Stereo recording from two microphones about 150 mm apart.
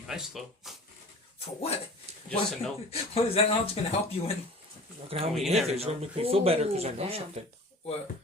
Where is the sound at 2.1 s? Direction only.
45° right (ahead or behind).